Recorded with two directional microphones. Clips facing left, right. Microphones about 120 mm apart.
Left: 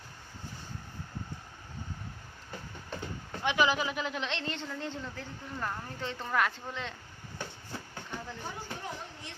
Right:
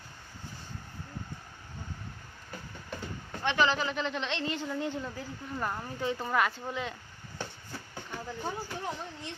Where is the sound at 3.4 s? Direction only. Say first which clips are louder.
Even; 10° left (ahead or behind).